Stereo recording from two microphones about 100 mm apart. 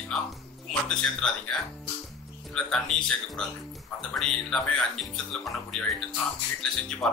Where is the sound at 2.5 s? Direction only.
5° left (ahead or behind).